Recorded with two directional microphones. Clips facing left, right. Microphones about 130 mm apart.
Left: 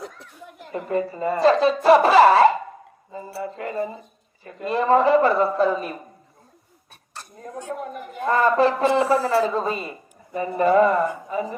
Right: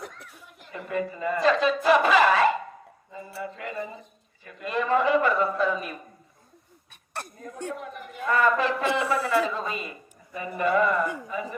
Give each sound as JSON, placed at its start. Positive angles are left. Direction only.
{"t": 0.7, "sound": "speech", "side_deg": 35}
{"t": 7.1, "sound": "a sound", "side_deg": -60}
{"t": 7.7, "sound": "a woman's voice", "side_deg": 40}